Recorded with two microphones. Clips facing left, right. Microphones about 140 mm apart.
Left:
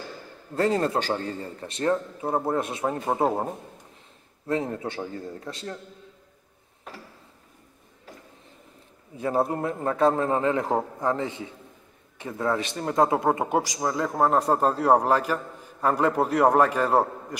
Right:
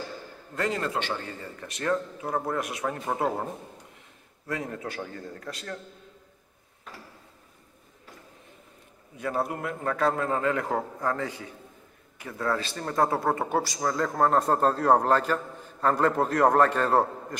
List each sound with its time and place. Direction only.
0.6 s speech: 35° left (ahead or behind)
4.5 s speech: 25° left (ahead or behind)
9.1 s a man's voice: 30° left (ahead or behind); by 17.4 s 10° left (ahead or behind)